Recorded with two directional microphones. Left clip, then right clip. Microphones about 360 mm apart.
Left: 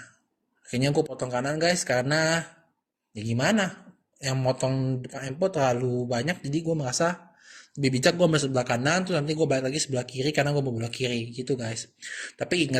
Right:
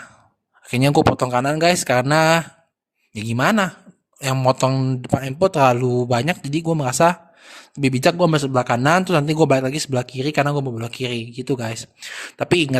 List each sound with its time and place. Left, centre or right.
0.7 s speech: right